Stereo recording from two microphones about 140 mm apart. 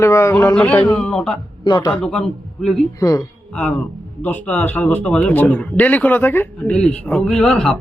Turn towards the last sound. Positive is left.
turn(degrees=5)  # may be behind; listen again after turning